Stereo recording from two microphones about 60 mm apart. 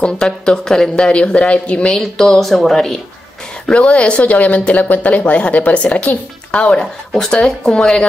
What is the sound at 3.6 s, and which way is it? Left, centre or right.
Speech, centre.